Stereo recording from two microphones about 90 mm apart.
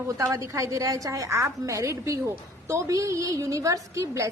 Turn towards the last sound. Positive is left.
turn(degrees=-35)  # may be behind; listen again after turning